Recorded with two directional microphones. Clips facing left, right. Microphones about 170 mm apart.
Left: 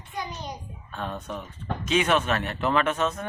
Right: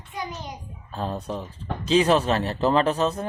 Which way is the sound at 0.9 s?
35° right (ahead or behind).